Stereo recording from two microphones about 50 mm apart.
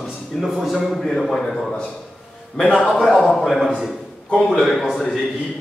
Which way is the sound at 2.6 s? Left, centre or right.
Left.